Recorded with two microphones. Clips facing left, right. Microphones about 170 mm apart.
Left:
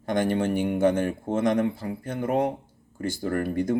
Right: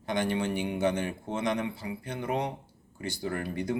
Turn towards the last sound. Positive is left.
turn(degrees=45)  # may be behind; listen again after turning